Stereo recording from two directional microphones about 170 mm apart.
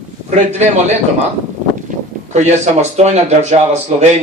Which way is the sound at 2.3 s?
40° right (ahead or behind).